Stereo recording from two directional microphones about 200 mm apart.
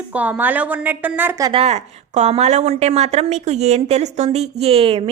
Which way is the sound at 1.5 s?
35° right (ahead or behind).